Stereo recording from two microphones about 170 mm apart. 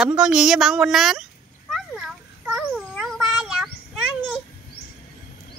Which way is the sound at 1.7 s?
5° right (ahead or behind).